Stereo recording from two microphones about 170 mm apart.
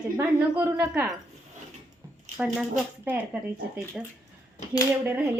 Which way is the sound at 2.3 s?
5° right (ahead or behind).